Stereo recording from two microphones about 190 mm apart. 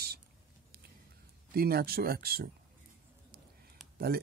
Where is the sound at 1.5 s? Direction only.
55° right (ahead or behind).